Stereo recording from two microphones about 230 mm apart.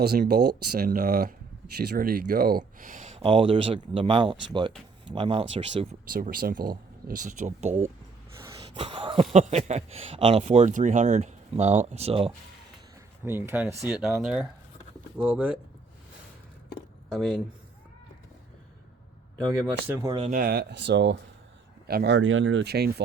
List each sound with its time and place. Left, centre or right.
0.0 s speech: right
6.1 s speech: right
8.5 s a sound: right
9.3 s speech: right
13.2 s speech: centre
19.5 s speech: centre
20.3 s speech: right